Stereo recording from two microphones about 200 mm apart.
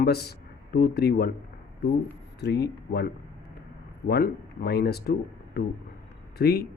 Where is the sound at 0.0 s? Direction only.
50° left (ahead or behind).